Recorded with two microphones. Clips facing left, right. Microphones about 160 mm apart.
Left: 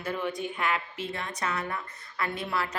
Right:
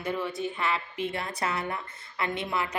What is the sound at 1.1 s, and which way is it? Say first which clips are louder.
A woman's voice: left 2 dB; 30° right (ahead or behind).